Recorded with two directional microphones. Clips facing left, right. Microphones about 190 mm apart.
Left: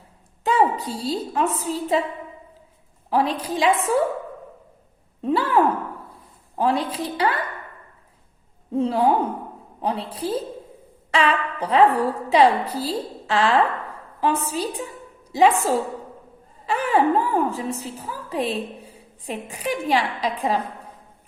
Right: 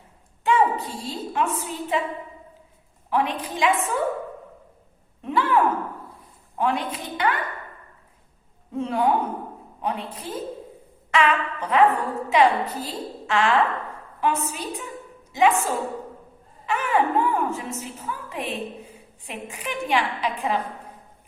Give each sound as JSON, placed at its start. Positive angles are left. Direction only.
{"t": 0.4, "sound": "a woman's voice", "side_deg": 35}
{"t": 3.1, "sound": "a woman's voice", "side_deg": 35}
{"t": 5.2, "sound": "a sound", "side_deg": 35}
{"t": 6.6, "sound": "a woman's voice", "side_deg": 35}
{"t": 8.7, "sound": "a woman's voice", "side_deg": 30}